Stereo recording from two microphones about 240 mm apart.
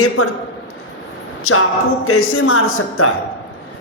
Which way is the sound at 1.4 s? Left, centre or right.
Left.